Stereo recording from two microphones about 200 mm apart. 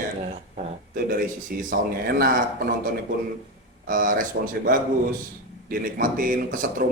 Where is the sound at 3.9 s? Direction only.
40° right (ahead or behind).